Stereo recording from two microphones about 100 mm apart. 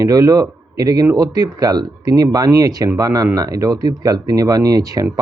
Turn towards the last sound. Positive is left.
turn(degrees=-40)  # may be behind; listen again after turning